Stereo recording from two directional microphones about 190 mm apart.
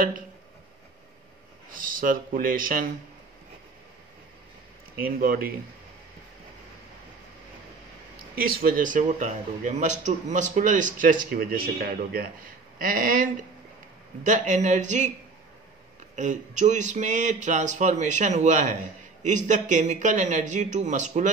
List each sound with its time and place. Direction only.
1.7 s speech: 45° right (ahead or behind)
5.0 s a man's voice: 50° right (ahead or behind)
8.4 s a man's voice: 50° right (ahead or behind)
16.2 s speech: 40° right (ahead or behind)